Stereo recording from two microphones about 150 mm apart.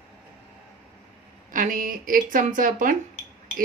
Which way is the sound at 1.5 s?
65° right (ahead or behind).